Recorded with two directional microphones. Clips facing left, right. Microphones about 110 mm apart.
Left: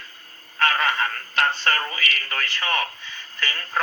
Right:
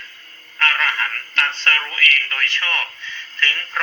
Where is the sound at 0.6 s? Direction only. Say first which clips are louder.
Left 1 dB; 20° left (ahead or behind).